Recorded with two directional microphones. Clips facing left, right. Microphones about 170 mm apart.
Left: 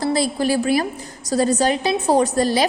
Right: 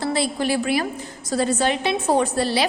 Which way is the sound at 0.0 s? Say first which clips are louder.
Left 3 dB; 40° left (ahead or behind).